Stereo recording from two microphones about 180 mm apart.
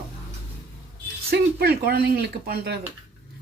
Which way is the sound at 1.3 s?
60° right (ahead or behind).